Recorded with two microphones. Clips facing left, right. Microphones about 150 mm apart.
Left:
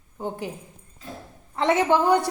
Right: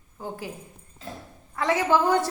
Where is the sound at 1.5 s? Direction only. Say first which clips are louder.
Left 2 dB; 25° left (ahead or behind).